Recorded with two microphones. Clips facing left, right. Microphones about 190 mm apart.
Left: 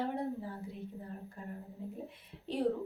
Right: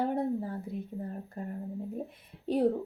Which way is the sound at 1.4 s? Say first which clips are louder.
Right 10 dB; 45° right (ahead or behind).